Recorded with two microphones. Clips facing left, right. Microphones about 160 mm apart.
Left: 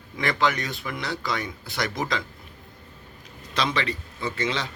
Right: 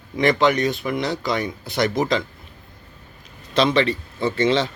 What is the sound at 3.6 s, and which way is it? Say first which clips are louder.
Speech: right 8 dB; 25° right (ahead or behind).